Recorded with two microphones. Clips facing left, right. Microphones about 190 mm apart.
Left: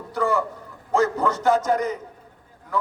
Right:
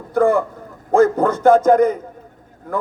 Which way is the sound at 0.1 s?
50° right (ahead or behind).